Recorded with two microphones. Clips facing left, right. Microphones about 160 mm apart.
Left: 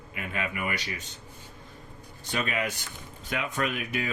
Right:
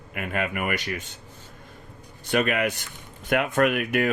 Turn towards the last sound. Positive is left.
turn(degrees=-60)  # may be behind; listen again after turning